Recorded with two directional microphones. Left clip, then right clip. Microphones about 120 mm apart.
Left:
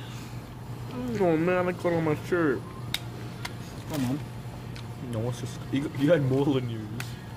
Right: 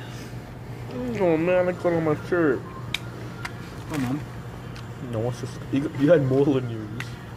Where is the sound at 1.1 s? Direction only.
60° left (ahead or behind).